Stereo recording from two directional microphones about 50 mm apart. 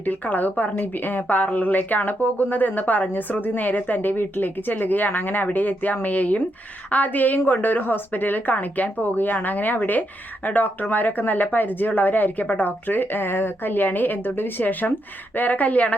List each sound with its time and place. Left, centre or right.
0.0 s a woman's voice: left